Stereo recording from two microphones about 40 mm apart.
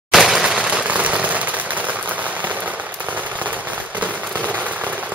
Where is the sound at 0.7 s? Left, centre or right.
Right.